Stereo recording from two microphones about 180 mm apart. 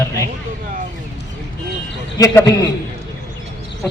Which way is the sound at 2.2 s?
20° left (ahead or behind).